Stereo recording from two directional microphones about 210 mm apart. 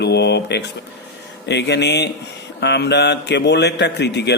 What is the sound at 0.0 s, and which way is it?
A man's voice, 55° left (ahead or behind).